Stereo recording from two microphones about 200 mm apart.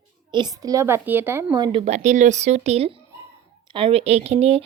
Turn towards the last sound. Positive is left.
turn(degrees=-30)  # may be behind; listen again after turning